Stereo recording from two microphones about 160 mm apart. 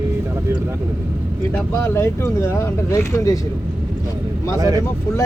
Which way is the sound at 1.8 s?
15° left (ahead or behind).